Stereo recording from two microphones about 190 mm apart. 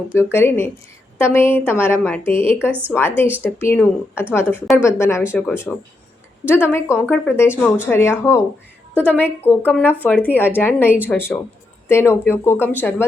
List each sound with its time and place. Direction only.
0.1 s speech: 10° left (ahead or behind)
7.5 s speech: 5° right (ahead or behind)
7.9 s speech: 10° left (ahead or behind)